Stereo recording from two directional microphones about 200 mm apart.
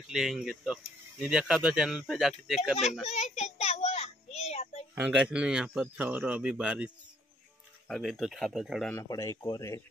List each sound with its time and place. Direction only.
0.1 s speech: 5° right (ahead or behind)
3.1 s child singing: 35° left (ahead or behind)
4.9 s speech: 5° right (ahead or behind)
7.9 s speech: centre (ahead or behind)
8.9 s speech: 15° left (ahead or behind)